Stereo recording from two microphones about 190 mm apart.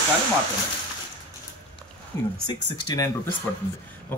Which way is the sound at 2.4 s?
20° left (ahead or behind).